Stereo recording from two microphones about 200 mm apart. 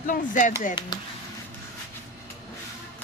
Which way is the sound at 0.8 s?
25° left (ahead or behind).